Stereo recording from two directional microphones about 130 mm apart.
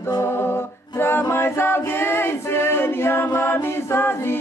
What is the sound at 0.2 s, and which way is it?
A capella, 15° left (ahead or behind).